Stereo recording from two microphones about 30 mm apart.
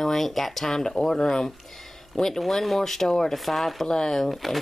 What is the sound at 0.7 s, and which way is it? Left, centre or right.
Speech, left.